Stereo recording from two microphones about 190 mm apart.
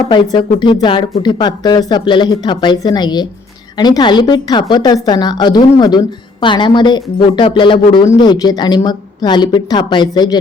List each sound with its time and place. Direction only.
0.1 s speech: 25° left (ahead or behind)